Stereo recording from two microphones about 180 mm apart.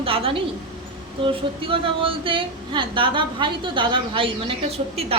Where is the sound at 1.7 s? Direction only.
30° right (ahead or behind).